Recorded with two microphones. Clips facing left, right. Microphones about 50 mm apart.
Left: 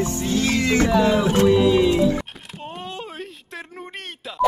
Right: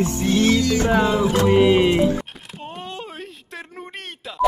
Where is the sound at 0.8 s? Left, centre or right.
Right.